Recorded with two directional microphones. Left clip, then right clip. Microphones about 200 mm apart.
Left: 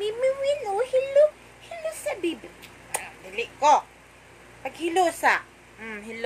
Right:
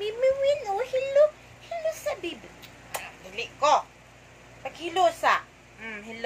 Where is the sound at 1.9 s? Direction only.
20° left (ahead or behind).